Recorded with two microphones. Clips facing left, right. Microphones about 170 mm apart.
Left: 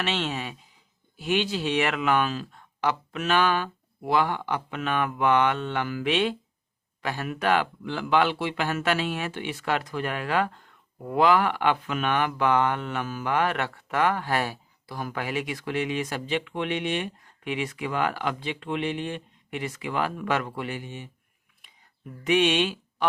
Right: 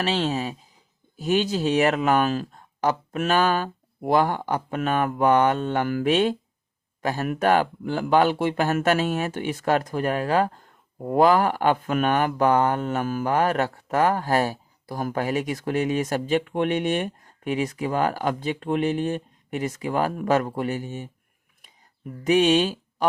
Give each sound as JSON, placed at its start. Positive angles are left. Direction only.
{"t": 0.0, "sound": "speech", "side_deg": -35}
{"t": 22.2, "sound": "speech", "side_deg": -40}